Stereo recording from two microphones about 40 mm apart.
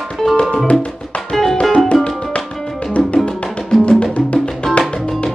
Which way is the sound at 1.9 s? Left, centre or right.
Centre.